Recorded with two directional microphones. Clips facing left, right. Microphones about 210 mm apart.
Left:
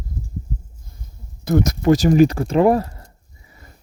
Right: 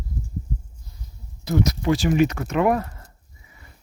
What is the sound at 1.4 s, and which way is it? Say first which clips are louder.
Speech: left 5 dB; 50° left (ahead or behind).